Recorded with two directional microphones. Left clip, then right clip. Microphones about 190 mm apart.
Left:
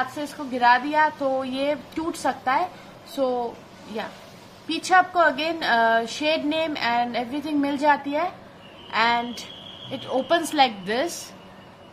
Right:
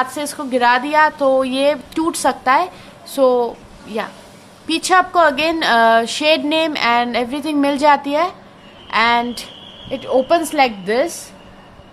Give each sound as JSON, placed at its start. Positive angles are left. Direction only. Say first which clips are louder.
{"t": 0.0, "sound": "a woman's voice", "louder": "right 7 dB", "side_deg": -50}
{"t": 4.6, "sound": "a woman's voice", "louder": "right 5 dB", "side_deg": -45}